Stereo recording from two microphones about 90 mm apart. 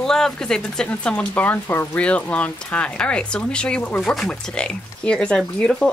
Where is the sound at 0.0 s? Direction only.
5° left (ahead or behind).